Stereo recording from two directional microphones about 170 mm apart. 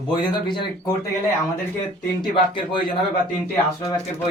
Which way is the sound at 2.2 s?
25° left (ahead or behind).